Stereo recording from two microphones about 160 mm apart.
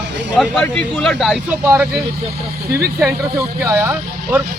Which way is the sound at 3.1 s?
15° right (ahead or behind).